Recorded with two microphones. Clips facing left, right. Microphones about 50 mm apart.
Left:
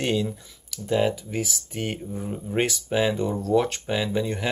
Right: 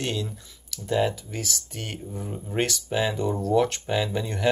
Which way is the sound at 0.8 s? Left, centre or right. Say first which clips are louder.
Left 1 dB; centre.